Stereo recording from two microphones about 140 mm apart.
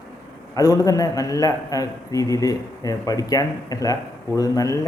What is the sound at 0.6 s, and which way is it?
A man's voice, 25° left (ahead or behind).